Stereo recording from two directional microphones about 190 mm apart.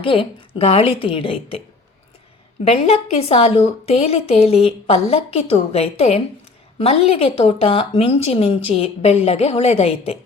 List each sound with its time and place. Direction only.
0.0 s a woman's voice: 25° left (ahead or behind)
2.6 s a woman's voice: 35° left (ahead or behind)